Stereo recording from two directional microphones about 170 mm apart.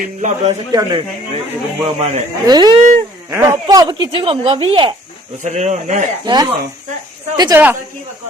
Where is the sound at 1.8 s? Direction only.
40° right (ahead or behind).